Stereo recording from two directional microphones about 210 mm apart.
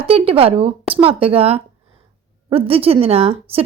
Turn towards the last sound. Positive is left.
turn(degrees=-30)  # may be behind; listen again after turning